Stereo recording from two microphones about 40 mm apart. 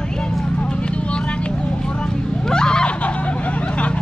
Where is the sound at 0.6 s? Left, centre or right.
Left.